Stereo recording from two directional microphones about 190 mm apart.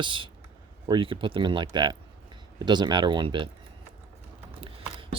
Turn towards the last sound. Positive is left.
turn(degrees=-25)  # may be behind; listen again after turning